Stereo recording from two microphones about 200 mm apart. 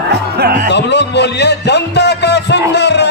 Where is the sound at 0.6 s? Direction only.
60° left (ahead or behind).